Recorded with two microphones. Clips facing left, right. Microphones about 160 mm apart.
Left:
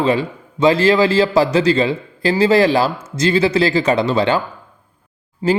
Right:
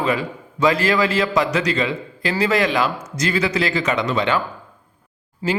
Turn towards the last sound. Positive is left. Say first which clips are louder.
# left 6 dB
turn(degrees=25)  # may be behind; listen again after turning